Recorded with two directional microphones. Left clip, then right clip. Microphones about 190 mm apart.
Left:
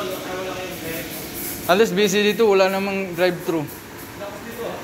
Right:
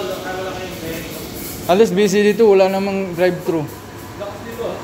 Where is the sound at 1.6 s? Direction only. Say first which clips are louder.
Right 3 dB; 10° right (ahead or behind).